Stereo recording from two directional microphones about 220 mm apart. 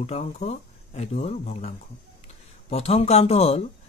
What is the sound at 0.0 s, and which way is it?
Speech, 30° left (ahead or behind).